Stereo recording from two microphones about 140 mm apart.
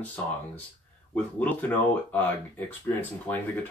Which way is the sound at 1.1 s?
10° left (ahead or behind).